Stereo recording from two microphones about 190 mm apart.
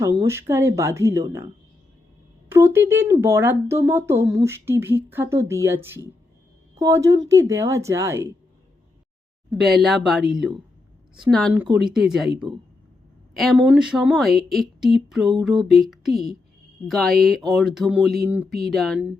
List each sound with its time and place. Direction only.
0.0 s speech: 15° right (ahead or behind)
2.5 s a woman's voice: 15° right (ahead or behind)
9.5 s speech: centre (ahead or behind)
13.3 s speech: centre (ahead or behind)